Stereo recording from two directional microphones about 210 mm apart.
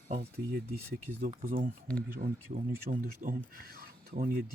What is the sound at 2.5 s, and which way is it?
Speech, 40° right (ahead or behind).